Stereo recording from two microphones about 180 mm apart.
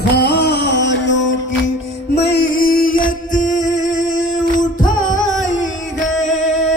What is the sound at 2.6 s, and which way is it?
Music, 55° left (ahead or behind).